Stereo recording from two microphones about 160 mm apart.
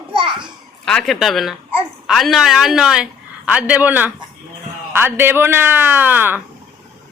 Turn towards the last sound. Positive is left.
turn(degrees=-10)  # may be behind; listen again after turning